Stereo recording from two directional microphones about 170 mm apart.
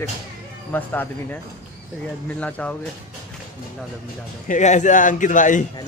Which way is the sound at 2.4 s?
10° left (ahead or behind).